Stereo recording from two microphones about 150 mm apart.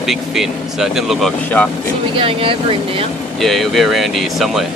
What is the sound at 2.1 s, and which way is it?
Speech, 35° right (ahead or behind).